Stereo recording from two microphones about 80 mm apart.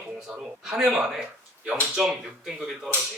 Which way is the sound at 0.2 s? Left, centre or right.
Centre.